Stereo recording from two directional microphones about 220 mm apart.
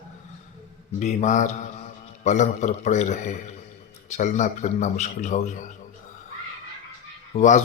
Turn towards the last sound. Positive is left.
turn(degrees=30)  # may be behind; listen again after turning